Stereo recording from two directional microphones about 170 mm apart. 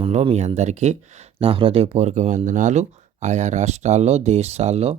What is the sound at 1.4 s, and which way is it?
Speech, 30° right (ahead or behind).